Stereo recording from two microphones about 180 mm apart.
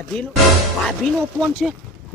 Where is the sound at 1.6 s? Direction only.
Centre (ahead or behind).